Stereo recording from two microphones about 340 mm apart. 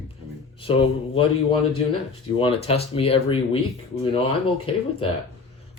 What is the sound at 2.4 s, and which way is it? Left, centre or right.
Speech, centre.